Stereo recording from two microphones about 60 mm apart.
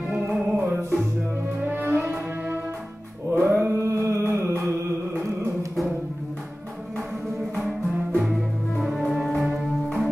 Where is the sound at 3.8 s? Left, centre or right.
Right.